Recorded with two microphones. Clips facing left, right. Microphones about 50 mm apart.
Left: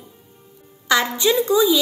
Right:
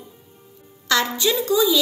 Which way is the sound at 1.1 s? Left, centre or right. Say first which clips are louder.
Left 3 dB; left.